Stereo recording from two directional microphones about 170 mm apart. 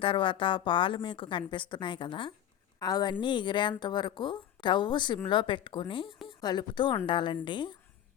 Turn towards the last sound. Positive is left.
turn(degrees=25)  # may be behind; listen again after turning